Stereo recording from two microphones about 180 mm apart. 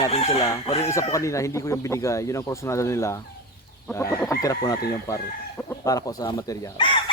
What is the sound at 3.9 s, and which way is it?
Chicken, 10° left (ahead or behind).